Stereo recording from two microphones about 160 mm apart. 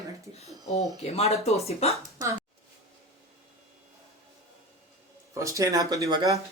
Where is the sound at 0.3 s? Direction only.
40° left (ahead or behind).